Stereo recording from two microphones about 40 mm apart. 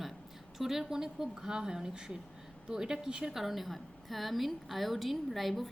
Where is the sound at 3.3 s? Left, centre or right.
Centre.